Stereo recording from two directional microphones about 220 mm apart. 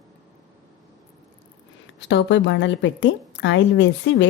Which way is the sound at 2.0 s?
55° left (ahead or behind).